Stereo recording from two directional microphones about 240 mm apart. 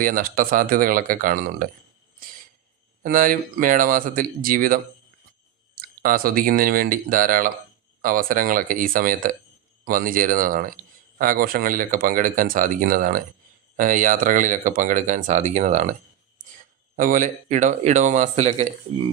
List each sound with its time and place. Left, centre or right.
0.0 s speech: right
3.0 s speech: right
17.0 s speech: right